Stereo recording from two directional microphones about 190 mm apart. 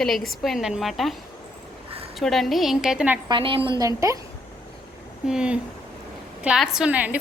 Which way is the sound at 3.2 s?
25° right (ahead or behind).